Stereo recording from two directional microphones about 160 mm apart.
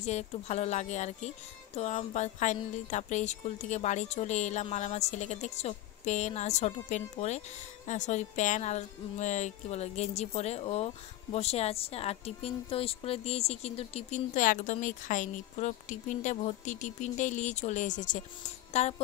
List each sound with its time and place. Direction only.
0.0 s a woman's voice: 45° left (ahead or behind)